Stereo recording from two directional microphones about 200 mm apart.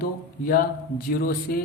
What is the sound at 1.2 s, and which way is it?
Music, 50° left (ahead or behind).